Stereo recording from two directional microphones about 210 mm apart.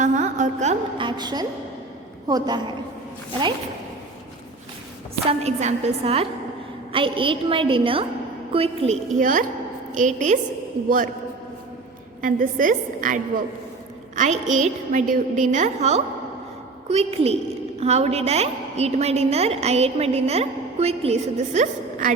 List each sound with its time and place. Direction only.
0.0 s music: 35° right (ahead or behind); by 1.5 s 20° right (ahead or behind)
2.2 s a woman's voice: 20° right (ahead or behind)
5.3 s a woman's voice: 30° right (ahead or behind)
12.2 s a woman's voice: 40° right (ahead or behind)
14.2 s a woman's voice: 35° right (ahead or behind)